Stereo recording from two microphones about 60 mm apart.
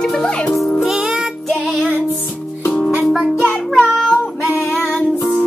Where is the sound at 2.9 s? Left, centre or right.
Right.